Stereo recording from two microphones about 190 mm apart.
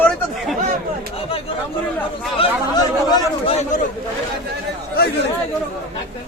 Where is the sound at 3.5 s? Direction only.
35° left (ahead or behind).